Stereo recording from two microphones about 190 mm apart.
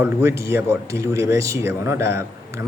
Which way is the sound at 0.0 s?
15° right (ahead or behind).